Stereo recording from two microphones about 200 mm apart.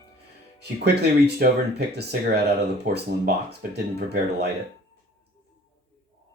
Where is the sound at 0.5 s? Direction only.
55° right (ahead or behind).